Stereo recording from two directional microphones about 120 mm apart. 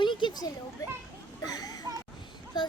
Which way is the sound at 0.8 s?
30° left (ahead or behind).